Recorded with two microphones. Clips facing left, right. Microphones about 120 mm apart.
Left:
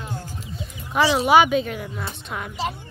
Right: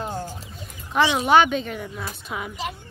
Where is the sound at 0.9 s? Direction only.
5° left (ahead or behind).